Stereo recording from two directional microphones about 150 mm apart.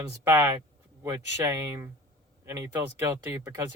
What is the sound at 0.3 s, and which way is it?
Speech, 20° right (ahead or behind).